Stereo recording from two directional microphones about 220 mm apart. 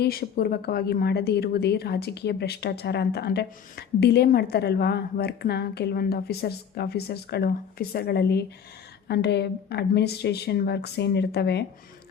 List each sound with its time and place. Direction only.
0.0 s speech: 45° left (ahead or behind)